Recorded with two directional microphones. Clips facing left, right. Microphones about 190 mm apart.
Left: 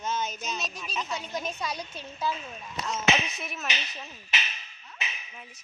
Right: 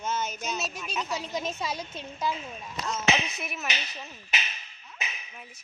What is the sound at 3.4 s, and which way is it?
Speech, 10° right (ahead or behind).